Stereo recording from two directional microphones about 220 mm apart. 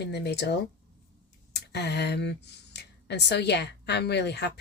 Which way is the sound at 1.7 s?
50° left (ahead or behind).